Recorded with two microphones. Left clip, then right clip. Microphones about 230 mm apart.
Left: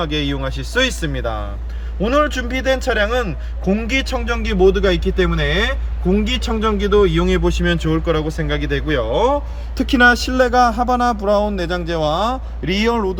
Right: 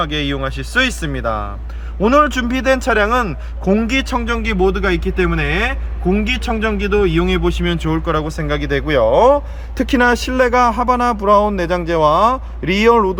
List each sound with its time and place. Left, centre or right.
0.0 s a man's voice: centre